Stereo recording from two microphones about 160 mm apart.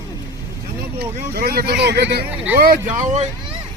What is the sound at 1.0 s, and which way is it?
Speech, 80° right.